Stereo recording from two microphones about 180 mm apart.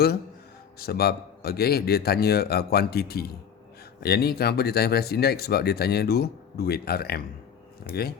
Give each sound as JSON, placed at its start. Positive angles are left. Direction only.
{"t": 0.8, "sound": "speech", "side_deg": 60}